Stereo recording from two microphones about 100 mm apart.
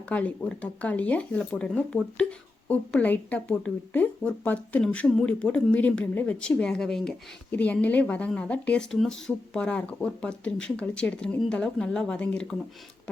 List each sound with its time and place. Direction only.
0.1 s speech: 15° left (ahead or behind)